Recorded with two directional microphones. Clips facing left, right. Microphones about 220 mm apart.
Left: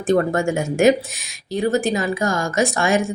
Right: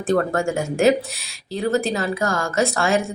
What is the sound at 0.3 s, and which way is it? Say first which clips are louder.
Speech: left 2 dB; 15° left (ahead or behind).